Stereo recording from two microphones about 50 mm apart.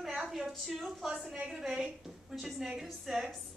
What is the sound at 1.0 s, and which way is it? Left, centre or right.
A woman's voice, centre.